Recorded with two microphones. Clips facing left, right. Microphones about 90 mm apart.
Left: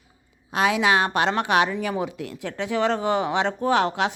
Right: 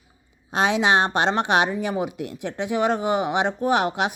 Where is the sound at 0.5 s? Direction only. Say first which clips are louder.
Right 1 dB; 25° right (ahead or behind).